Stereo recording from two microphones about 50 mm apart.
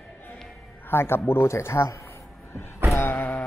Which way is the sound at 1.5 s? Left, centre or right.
Left.